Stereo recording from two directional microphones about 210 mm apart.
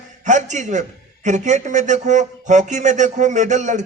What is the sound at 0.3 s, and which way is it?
A man's voice, 35° right (ahead or behind).